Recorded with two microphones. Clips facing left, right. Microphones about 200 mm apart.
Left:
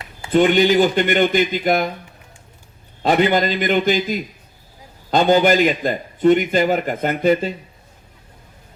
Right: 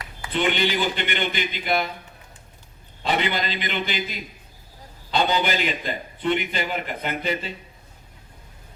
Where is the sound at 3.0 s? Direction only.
45° left (ahead or behind).